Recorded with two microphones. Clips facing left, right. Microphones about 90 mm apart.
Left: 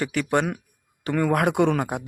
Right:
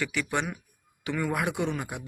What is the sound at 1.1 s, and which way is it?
Mantra, 55° left (ahead or behind).